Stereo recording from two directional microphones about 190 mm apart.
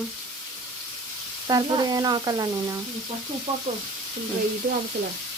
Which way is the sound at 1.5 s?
20° right (ahead or behind).